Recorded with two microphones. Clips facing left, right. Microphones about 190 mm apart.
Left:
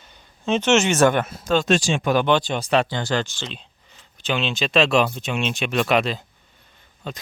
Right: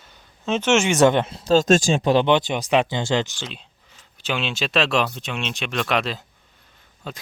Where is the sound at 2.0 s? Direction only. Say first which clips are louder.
Right 2 dB; 25° right (ahead or behind).